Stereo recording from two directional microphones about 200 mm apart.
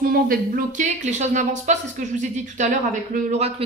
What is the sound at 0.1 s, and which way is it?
Speech, 40° right (ahead or behind).